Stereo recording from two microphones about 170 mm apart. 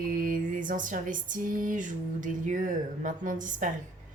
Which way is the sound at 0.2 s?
55° right (ahead or behind).